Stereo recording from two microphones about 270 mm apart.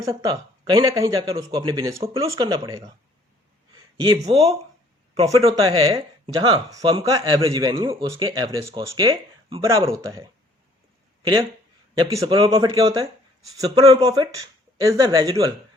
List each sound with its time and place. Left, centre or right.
0.0 s speech: centre
4.0 s speech: centre